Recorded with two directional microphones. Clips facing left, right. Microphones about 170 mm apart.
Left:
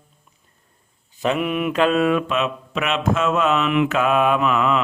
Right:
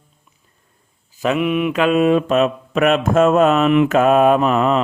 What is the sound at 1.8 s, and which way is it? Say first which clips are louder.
Mantra: right 3 dB; 15° right (ahead or behind).